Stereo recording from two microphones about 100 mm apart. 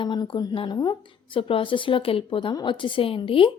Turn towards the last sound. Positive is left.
turn(degrees=65)  # may be behind; listen again after turning